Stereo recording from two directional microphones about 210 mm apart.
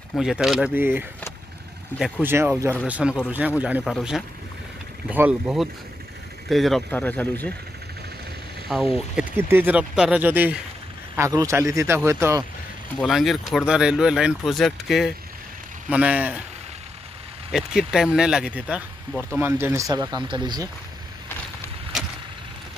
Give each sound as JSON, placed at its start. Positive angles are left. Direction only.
{"t": 0.1, "sound": "speech", "side_deg": 0}
{"t": 2.0, "sound": "speech", "side_deg": 0}
{"t": 2.2, "sound": "speech", "side_deg": -10}
{"t": 8.6, "sound": "speech", "side_deg": 0}
{"t": 12.9, "sound": "speech", "side_deg": 0}
{"t": 17.5, "sound": "speech", "side_deg": -5}